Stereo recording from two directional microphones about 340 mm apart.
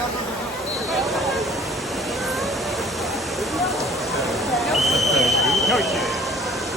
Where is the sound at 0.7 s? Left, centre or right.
Centre.